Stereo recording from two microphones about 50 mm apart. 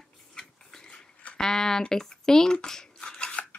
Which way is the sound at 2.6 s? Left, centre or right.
Centre.